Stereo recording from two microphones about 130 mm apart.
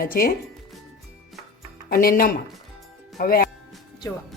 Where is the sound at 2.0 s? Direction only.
90° left.